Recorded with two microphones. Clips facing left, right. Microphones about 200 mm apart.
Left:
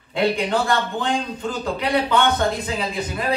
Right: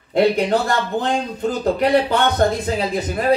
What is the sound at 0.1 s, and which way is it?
Speech, 45° right (ahead or behind).